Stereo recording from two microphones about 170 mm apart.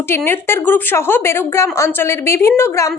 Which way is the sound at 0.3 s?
15° left (ahead or behind).